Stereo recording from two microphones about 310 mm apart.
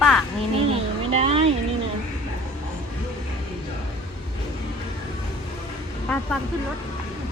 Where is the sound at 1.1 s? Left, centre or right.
Centre.